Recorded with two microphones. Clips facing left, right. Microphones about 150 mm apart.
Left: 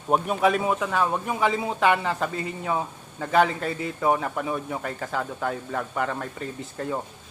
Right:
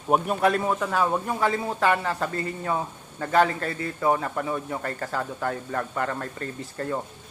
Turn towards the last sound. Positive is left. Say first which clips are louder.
# even
turn(degrees=5)  # may be behind; listen again after turning